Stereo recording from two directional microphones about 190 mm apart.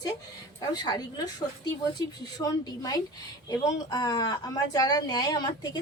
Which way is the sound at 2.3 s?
20° left (ahead or behind).